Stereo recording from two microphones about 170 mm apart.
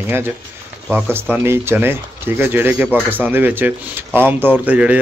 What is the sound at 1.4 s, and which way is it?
Speech, 15° right (ahead or behind).